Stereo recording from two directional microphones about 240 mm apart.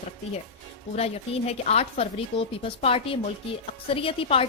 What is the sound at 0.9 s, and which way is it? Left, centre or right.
A woman's voice, left.